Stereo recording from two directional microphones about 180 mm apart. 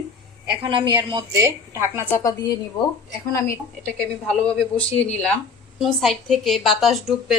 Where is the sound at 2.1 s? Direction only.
20° left (ahead or behind).